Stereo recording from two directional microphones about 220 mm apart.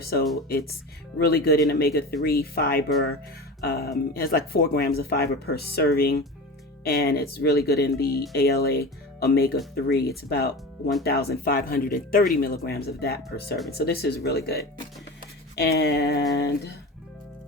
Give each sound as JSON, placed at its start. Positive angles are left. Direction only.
{"t": 0.0, "sound": "speech", "side_deg": 45}